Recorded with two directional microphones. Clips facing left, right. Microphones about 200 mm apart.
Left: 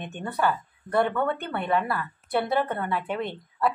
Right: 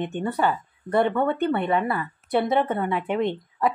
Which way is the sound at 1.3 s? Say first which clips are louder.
Right 5 dB; 5° right (ahead or behind).